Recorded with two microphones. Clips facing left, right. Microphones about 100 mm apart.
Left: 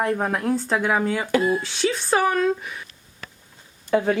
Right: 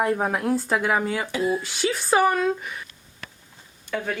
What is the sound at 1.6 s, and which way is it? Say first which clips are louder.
A woman's voice: left 2 dB; 5° right (ahead or behind).